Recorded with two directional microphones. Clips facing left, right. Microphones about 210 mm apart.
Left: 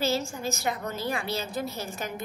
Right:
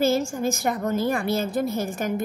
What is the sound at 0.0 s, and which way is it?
A woman's voice, 50° right (ahead or behind).